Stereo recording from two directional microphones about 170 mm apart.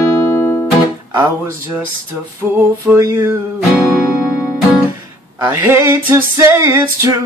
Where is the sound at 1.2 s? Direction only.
15° right (ahead or behind).